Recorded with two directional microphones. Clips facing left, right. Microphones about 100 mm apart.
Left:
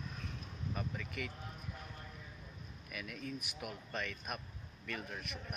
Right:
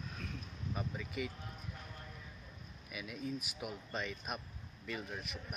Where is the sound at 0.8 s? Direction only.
10° right (ahead or behind).